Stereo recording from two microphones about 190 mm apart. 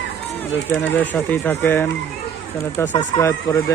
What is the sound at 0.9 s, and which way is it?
Speech, 10° left (ahead or behind).